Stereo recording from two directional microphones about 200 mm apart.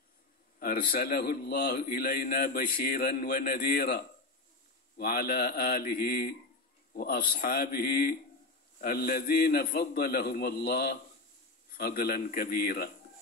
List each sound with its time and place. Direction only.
0.6 s a man's voice: 50° left (ahead or behind)